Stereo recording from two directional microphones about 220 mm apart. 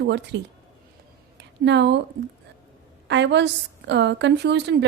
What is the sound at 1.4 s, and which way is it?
Speech, 50° right (ahead or behind).